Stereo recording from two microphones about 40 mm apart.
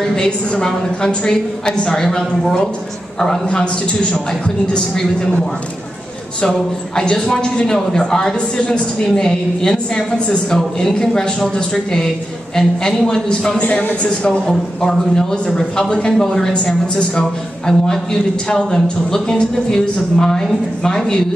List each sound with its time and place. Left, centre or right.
0.1 s speech: centre
3.4 s a woman's voice: left
7.0 s speech: centre
9.9 s a woman's voice: left
10.5 s speech: centre
15.4 s speech: centre